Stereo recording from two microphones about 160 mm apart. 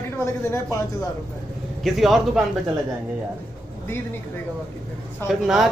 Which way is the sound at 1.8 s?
Centre (ahead or behind).